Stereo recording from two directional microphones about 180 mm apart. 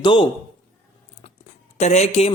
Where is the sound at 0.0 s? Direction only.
25° left (ahead or behind).